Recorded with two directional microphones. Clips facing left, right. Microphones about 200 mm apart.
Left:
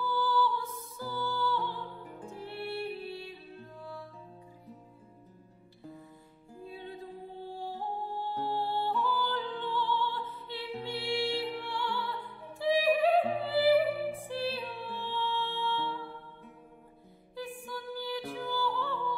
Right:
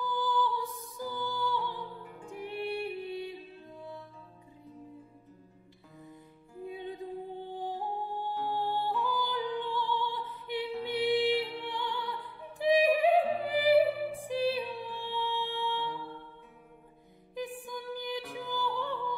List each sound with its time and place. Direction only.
0.0 s music: 15° right (ahead or behind)
6.6 s music: 20° right (ahead or behind)
17.6 s music: 20° right (ahead or behind)